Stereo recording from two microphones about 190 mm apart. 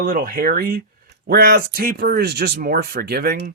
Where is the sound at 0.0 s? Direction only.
45° right (ahead or behind).